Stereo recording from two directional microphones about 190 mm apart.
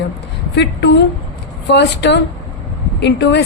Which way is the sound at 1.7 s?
65° left (ahead or behind).